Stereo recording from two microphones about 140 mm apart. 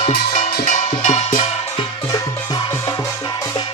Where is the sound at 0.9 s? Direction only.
55° left (ahead or behind).